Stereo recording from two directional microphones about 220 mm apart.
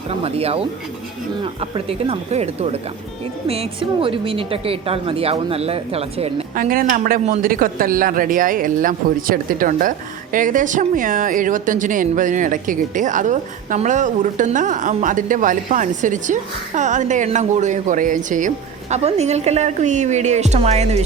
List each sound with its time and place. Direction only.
0.1 s a woman's voice: 25° right (ahead or behind)
6.6 s speech: 40° right (ahead or behind)